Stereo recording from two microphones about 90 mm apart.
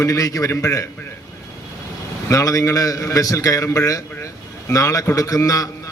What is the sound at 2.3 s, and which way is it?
A man's voice, 40° left (ahead or behind).